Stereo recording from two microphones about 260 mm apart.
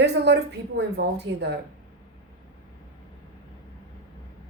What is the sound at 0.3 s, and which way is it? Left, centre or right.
A woman's voice, right.